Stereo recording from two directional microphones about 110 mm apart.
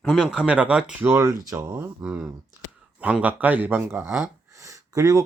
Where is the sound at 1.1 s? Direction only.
30° right (ahead or behind).